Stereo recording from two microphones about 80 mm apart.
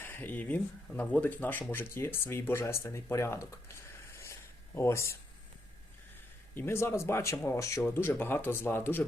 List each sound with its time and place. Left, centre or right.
0.0 s speech: left
3.7 s a sound: left
6.5 s speech: left
7.8 s speech: left